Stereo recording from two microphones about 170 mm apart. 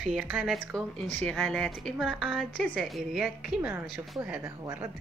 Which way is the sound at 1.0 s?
10° left (ahead or behind).